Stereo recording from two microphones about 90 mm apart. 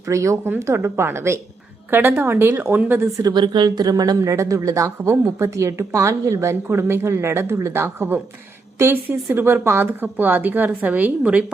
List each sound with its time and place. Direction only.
0.1 s speech: 35° right (ahead or behind)
3.2 s speech: 50° right (ahead or behind); by 11.4 s 15° right (ahead or behind)